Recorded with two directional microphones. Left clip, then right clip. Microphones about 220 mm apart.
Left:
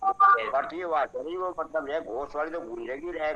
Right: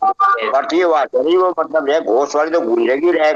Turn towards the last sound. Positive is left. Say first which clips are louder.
# right 18 dB
turn(degrees=-50)  # may be behind; listen again after turning